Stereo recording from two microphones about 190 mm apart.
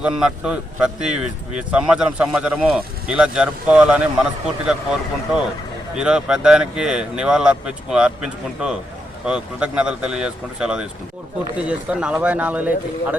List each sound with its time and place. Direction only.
0.0 s speech: 5° right (ahead or behind)
6.0 s speech: 5° right (ahead or behind)